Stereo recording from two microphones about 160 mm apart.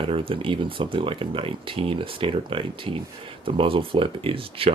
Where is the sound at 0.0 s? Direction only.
35° right (ahead or behind).